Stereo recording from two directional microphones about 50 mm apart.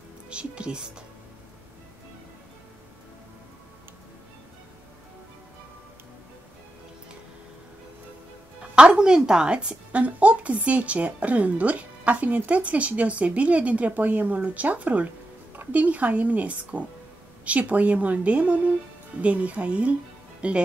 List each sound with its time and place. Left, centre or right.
0.3 s a woman's voice: right
8.7 s a woman's voice: centre